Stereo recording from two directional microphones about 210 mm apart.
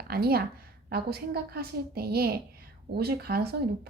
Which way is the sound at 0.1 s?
45° right (ahead or behind).